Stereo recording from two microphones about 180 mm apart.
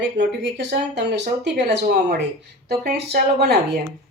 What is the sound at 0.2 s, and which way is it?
Speech, 70° right (ahead or behind).